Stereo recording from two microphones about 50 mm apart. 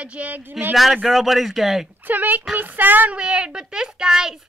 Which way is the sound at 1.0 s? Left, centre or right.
Centre.